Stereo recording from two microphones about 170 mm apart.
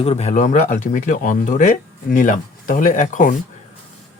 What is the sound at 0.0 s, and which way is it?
Speech, 35° left (ahead or behind).